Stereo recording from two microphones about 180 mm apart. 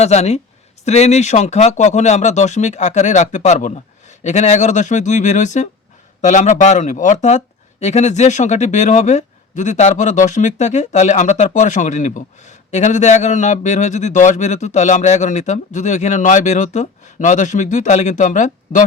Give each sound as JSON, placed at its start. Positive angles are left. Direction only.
{"t": 0.0, "sound": "speech", "side_deg": 35}